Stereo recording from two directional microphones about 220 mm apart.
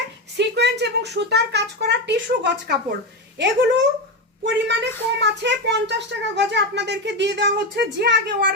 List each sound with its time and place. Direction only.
0.3 s speech: 50° right (ahead or behind)